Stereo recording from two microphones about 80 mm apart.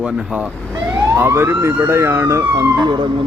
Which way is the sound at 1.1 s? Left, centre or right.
Right.